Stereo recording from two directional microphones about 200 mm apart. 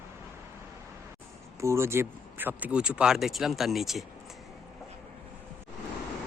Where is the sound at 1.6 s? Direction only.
15° right (ahead or behind).